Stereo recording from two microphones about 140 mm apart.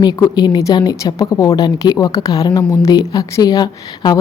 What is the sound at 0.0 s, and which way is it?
A woman's voice, 30° left (ahead or behind).